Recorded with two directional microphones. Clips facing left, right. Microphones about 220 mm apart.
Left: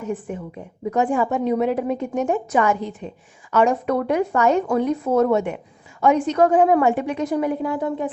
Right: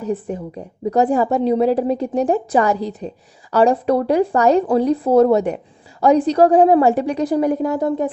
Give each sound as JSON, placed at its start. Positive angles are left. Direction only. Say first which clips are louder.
{"t": 0.0, "sound": "a woman's voice", "louder": "right 4 dB", "side_deg": -35}